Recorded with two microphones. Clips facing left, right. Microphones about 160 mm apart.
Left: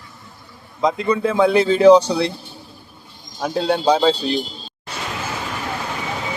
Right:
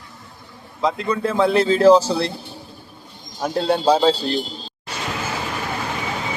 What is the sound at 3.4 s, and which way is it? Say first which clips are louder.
Speech: even; centre (ahead or behind).